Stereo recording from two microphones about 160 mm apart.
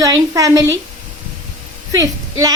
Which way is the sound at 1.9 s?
20° right (ahead or behind).